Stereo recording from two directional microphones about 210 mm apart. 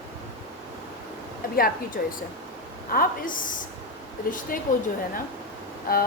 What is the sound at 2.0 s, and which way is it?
A woman's voice, 45° left (ahead or behind).